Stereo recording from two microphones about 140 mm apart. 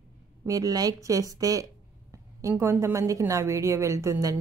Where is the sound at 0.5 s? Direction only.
25° right (ahead or behind).